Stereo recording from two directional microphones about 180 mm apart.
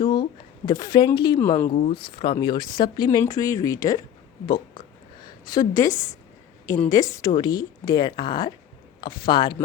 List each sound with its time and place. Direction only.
0.0 s speech: 25° left (ahead or behind)
1.4 s a woman's voice: 15° left (ahead or behind)
1.7 s speech: 30° left (ahead or behind)
5.5 s a woman's voice: 20° left (ahead or behind)